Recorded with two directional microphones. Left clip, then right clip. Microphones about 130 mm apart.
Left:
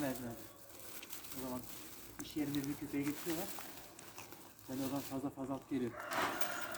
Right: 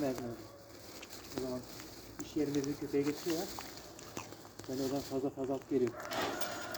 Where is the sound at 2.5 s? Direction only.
20° left (ahead or behind).